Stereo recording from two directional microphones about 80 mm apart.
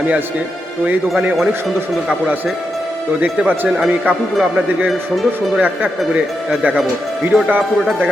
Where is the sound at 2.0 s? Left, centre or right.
Centre.